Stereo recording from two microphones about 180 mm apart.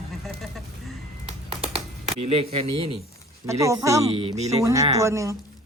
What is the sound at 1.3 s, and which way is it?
Typing, 35° right (ahead or behind).